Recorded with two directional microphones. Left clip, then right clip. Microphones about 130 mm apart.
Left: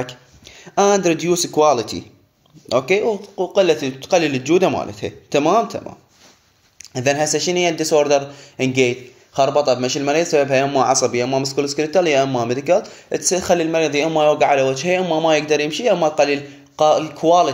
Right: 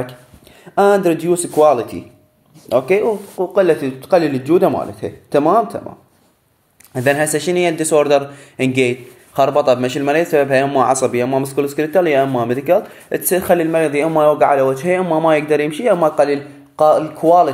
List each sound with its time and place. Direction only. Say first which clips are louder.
0.7 s speech: right 3 dB; 25° left (ahead or behind)
2.7 s speech: right 2 dB; 15° left (ahead or behind)
3.5 s speech: right 2 dB; centre (ahead or behind); by 5.9 s 20° left (ahead or behind)
7.0 s a man's voice: right 2 dB; 5° left (ahead or behind)
15.0 s speech: right 2 dB; 5° left (ahead or behind)
16.0 s a man's voice: right 3 dB; centre (ahead or behind)
16.3 s a man's voice: right 2 dB; 15° left (ahead or behind)